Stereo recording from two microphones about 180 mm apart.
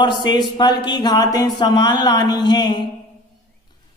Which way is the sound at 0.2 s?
25° left (ahead or behind).